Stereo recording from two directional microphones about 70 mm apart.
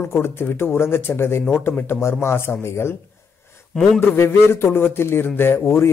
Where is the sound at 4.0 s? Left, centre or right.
Left.